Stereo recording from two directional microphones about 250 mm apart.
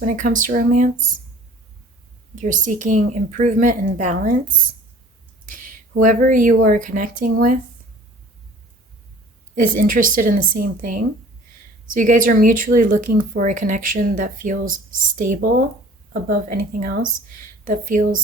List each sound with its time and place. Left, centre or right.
0.0 s speech: right
2.3 s speech: right
9.8 s speech: right